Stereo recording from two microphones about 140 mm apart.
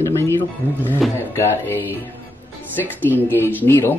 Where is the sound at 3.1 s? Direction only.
15° left (ahead or behind).